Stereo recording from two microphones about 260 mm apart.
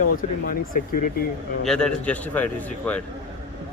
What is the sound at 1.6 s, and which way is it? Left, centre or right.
Speech, centre.